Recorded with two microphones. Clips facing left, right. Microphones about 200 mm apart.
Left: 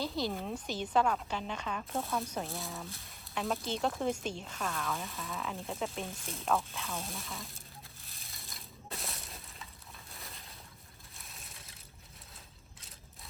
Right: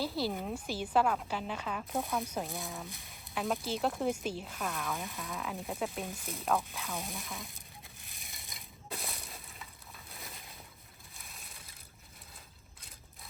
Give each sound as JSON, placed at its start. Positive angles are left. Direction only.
{"t": 0.0, "sound": "a woman's voice", "side_deg": -5}
{"t": 2.0, "sound": "speech", "side_deg": -15}
{"t": 2.4, "sound": "a woman's voice", "side_deg": 0}
{"t": 2.8, "sound": "speech", "side_deg": -15}
{"t": 3.1, "sound": "a woman's voice", "side_deg": 0}
{"t": 6.8, "sound": "speech", "side_deg": -15}
{"t": 7.3, "sound": "a woman's voice", "side_deg": 0}
{"t": 8.0, "sound": "crushing", "side_deg": -15}
{"t": 8.9, "sound": "a sound", "side_deg": 0}
{"t": 11.2, "sound": "crushing", "side_deg": 0}